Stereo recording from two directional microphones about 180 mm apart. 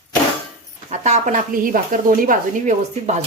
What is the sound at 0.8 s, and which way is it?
Speech, 40° right (ahead or behind).